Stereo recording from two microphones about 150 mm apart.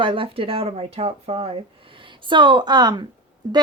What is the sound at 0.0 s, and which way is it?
Speech, 35° right (ahead or behind).